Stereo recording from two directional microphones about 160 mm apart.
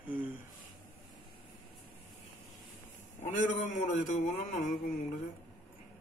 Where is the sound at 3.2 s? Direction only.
50° left (ahead or behind).